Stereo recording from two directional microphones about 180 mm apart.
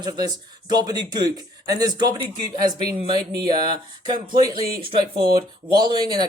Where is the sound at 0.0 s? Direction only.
20° right (ahead or behind).